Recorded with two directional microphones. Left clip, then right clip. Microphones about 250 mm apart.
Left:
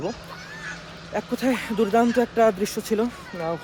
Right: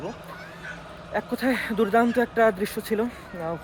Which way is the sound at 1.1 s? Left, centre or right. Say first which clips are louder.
Left 1 dB; centre.